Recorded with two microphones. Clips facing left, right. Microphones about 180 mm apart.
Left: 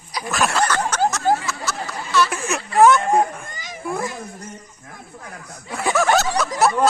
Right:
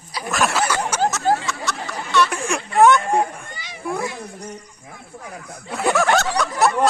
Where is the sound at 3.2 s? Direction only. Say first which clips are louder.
Left 2 dB; 45° left (ahead or behind).